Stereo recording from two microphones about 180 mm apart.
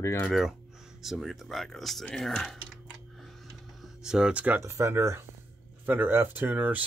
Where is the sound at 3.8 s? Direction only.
5° right (ahead or behind).